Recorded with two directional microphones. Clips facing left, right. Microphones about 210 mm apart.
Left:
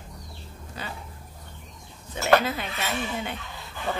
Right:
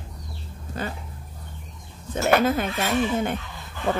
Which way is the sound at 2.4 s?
50° right (ahead or behind).